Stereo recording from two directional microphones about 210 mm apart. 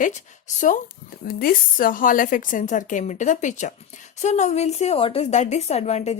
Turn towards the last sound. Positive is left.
turn(degrees=30)  # may be behind; listen again after turning